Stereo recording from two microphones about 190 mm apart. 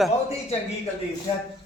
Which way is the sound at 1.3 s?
30° left (ahead or behind).